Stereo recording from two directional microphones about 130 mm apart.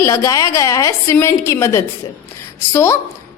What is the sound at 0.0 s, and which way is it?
A woman's voice, 25° left (ahead or behind).